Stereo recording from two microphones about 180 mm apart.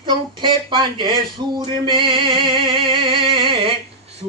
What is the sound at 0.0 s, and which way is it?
Speech, 25° right (ahead or behind).